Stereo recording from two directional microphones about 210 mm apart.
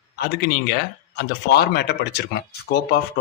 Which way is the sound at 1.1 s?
50° left (ahead or behind).